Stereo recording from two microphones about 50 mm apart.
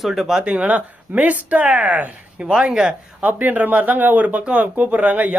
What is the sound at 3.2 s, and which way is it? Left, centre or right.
Speech, right.